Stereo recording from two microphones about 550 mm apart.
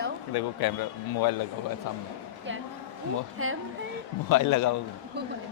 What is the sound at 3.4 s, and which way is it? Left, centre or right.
Speech, right.